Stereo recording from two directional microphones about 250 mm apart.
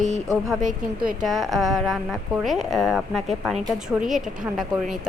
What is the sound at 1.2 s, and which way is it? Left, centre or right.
Speech, centre.